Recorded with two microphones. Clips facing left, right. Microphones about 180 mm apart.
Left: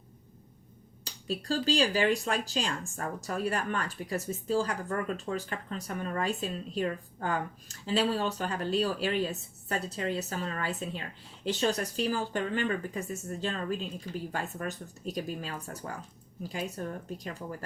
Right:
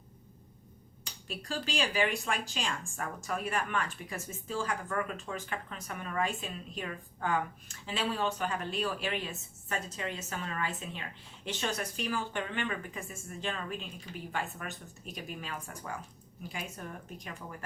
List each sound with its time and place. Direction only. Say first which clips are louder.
1.5 s speech: left 7 dB; 35° left (ahead or behind)